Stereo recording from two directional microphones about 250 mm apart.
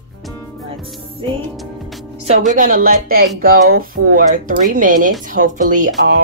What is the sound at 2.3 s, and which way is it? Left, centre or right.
Speech, right.